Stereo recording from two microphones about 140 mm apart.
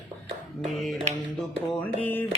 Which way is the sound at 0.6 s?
Centre (ahead or behind).